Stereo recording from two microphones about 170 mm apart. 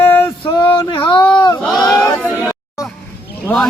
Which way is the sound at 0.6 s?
30° left (ahead or behind).